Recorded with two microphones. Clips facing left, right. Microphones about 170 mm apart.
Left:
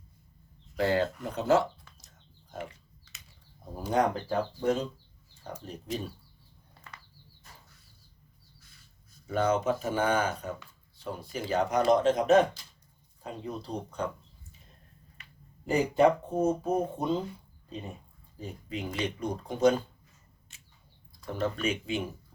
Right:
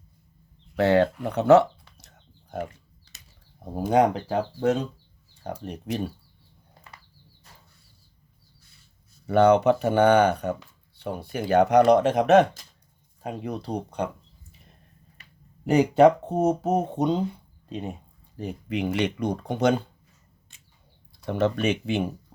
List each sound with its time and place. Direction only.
0.8 s speech: 70° right (ahead or behind)
1.2 s a sound: 70° right (ahead or behind)
3.6 s speech: 65° right (ahead or behind)
9.2 s speech: 70° right (ahead or behind)
15.6 s speech: 80° right
21.1 s speech: 70° right (ahead or behind)